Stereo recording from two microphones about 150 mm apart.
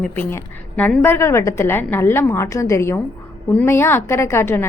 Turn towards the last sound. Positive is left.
turn(degrees=15)  # may be behind; listen again after turning